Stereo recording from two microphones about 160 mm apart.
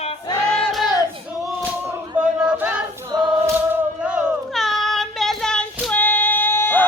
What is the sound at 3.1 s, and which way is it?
Choir, 25° right (ahead or behind).